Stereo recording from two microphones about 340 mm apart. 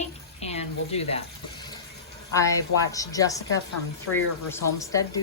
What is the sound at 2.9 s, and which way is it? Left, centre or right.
A woman's voice, centre.